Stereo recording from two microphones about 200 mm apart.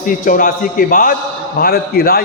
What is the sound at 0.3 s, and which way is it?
A man's voice, 45° left (ahead or behind).